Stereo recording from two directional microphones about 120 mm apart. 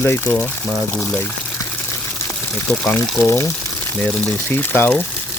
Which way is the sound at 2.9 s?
20° left (ahead or behind).